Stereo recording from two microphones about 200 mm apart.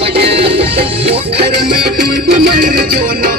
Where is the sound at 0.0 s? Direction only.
30° right (ahead or behind).